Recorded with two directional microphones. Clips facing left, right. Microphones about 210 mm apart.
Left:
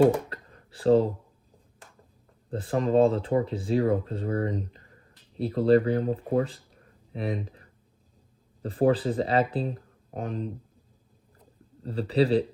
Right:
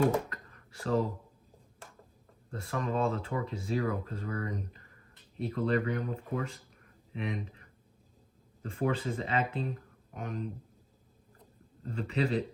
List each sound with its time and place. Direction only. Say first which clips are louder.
0.3 s a sound: left 5 dB; 30° left (ahead or behind)
2.5 s speech: left 9 dB; 30° left (ahead or behind)
11.8 s speech: left 8 dB; 35° left (ahead or behind)